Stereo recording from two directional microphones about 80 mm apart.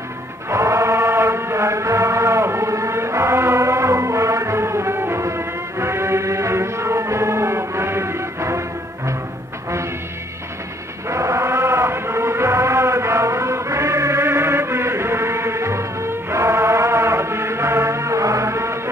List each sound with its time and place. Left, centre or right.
0.5 s chant: right
11.1 s chant: right